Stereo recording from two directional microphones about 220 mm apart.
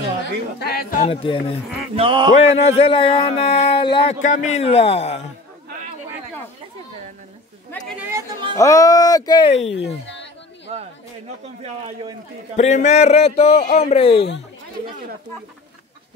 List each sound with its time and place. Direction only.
0.2 s a man's voice: 45° left (ahead or behind); by 1.4 s 25° left (ahead or behind)
2.0 s speech: 20° right (ahead or behind)
2.5 s speech: 25° left (ahead or behind)
8.0 s speech: 10° right (ahead or behind)
8.5 s speech: 15° left (ahead or behind)
10.7 s speech: 25° right (ahead or behind)
12.5 s speech: 30° left (ahead or behind)